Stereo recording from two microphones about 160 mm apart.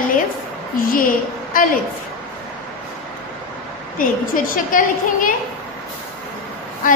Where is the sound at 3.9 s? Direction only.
60° left (ahead or behind).